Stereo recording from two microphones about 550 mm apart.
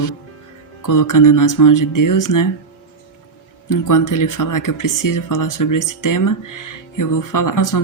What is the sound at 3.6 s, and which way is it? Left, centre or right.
Speech, left.